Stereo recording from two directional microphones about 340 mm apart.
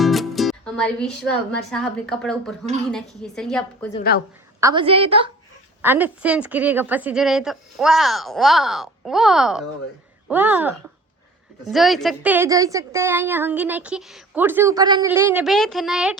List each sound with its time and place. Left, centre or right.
0.0 s music: centre
1.7 s a woman's voice: centre
3.9 s a woman's voice: left
4.6 s a woman's voice: centre
5.8 s a woman's voice: centre